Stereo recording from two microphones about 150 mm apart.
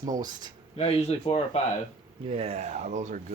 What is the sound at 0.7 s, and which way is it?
Speech, 45° left (ahead or behind).